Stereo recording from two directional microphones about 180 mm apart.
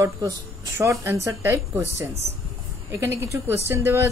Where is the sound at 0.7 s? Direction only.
15° right (ahead or behind).